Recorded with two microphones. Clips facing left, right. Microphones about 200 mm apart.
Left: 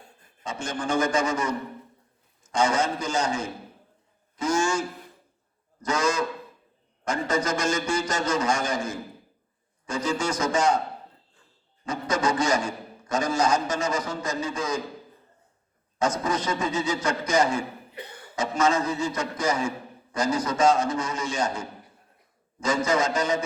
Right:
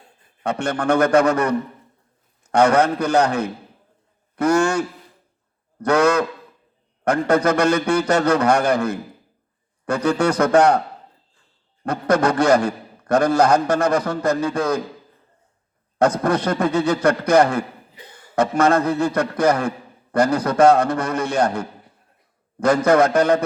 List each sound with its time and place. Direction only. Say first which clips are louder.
0.4 s a man's voice: right 9 dB; 65° right (ahead or behind)
11.9 s a man's voice: right 7 dB; 60° right (ahead or behind)
16.0 s a man's voice: right 8 dB; 60° right (ahead or behind)
18.0 s speech: left 5 dB; 65° left (ahead or behind)
18.3 s a man's voice: right 7 dB; 60° right (ahead or behind)